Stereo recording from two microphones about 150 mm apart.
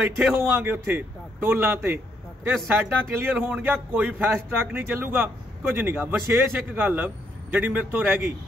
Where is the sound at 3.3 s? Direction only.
10° right (ahead or behind).